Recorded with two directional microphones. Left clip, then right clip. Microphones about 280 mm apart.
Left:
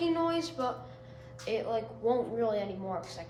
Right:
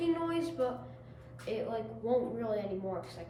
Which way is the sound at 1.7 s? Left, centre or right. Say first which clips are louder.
Left 2 dB; left.